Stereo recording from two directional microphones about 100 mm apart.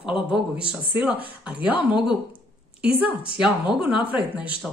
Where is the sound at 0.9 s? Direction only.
15° right (ahead or behind).